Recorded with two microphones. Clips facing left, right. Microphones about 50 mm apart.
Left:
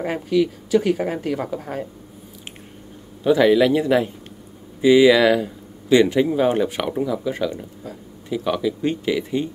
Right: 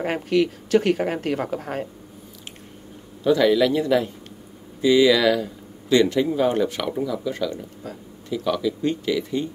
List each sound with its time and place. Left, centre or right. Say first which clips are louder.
0.0 s speech: left 1 dB; right
3.3 s speech: left 3 dB; left